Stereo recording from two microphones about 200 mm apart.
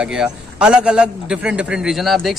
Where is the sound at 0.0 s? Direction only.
5° right (ahead or behind).